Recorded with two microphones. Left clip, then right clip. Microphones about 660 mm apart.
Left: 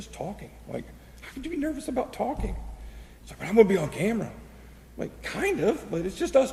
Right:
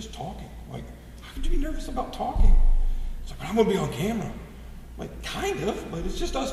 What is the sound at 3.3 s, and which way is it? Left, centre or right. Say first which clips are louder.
Speech: left 3 dB; right.